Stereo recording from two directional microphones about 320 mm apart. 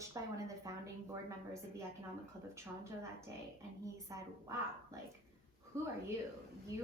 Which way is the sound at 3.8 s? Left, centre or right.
Centre.